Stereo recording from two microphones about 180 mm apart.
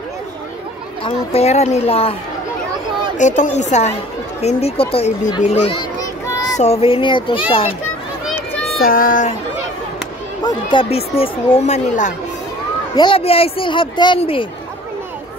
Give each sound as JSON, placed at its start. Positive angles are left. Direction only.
{"t": 1.0, "sound": "speech", "side_deg": 35}
{"t": 3.2, "sound": "speech", "side_deg": 45}
{"t": 5.9, "sound": "a sound", "side_deg": 20}
{"t": 6.6, "sound": "speech", "side_deg": 35}
{"t": 8.8, "sound": "speech", "side_deg": 50}
{"t": 10.4, "sound": "speech", "side_deg": 25}
{"t": 12.9, "sound": "speech", "side_deg": 30}